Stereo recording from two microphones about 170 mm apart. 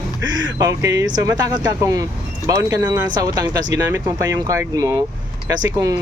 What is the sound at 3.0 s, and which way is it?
Speech, 20° right (ahead or behind).